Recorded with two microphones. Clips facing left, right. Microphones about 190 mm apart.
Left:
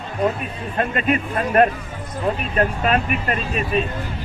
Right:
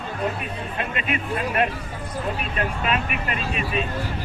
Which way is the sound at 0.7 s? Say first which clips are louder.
Left 8 dB; 45° left (ahead or behind).